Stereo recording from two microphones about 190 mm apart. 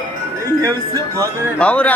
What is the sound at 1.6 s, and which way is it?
Speech, 5° left (ahead or behind).